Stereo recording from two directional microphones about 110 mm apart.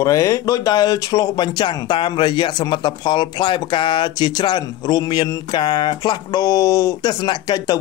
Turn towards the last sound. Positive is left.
turn(degrees=40)  # may be behind; listen again after turning